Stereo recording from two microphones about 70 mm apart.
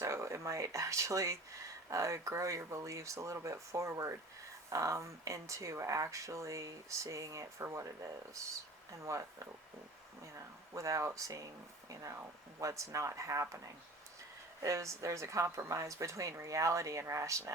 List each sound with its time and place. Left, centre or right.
0.0 s speech: right
10.8 s speech: right
12.5 s speech: right
14.6 s speech: right